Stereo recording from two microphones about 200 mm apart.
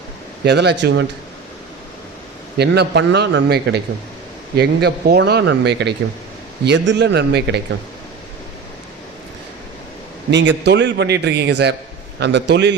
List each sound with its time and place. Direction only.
0.4 s a man's voice: 55° right (ahead or behind)
2.6 s a man's voice: 55° right (ahead or behind)
10.3 s a man's voice: 60° right (ahead or behind)